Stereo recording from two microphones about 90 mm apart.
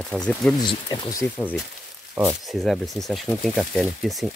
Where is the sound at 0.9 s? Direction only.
50° left (ahead or behind).